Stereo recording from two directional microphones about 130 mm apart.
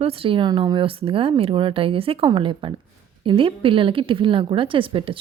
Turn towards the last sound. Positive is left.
turn(degrees=-45)  # may be behind; listen again after turning